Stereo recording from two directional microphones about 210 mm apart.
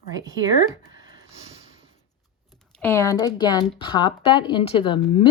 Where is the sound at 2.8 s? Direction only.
10° left (ahead or behind).